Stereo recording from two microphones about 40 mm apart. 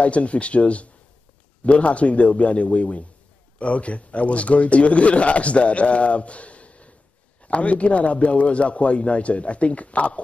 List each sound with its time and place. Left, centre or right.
0.0 s a man's voice: left